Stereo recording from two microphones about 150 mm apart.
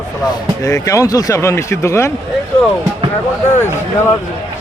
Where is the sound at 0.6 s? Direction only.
20° left (ahead or behind).